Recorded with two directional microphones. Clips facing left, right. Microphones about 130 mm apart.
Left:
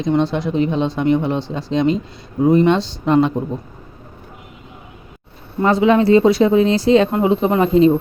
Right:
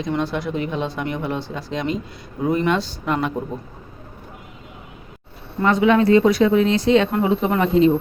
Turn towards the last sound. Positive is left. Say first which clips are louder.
# left 3 dB
turn(degrees=30)  # may be behind; listen again after turning